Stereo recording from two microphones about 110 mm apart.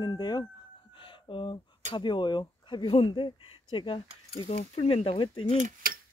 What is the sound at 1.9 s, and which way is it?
Speech, 45° left (ahead or behind).